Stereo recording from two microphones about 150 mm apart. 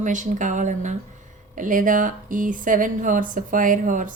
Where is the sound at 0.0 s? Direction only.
55° right (ahead or behind).